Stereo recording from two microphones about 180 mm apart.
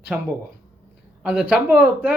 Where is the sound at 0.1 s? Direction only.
5° right (ahead or behind).